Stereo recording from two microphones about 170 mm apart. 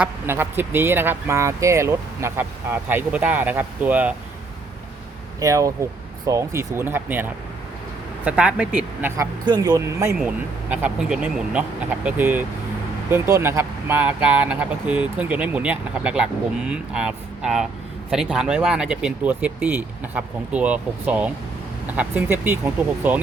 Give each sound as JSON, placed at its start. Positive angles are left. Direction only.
{"t": 0.0, "sound": "speech", "side_deg": -10}
{"t": 5.4, "sound": "speech", "side_deg": -20}
{"t": 9.4, "sound": "speech", "side_deg": -25}